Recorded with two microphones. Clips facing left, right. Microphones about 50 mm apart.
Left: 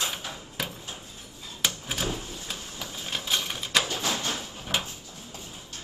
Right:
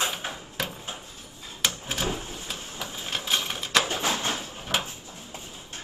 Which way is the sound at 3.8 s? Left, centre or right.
Right.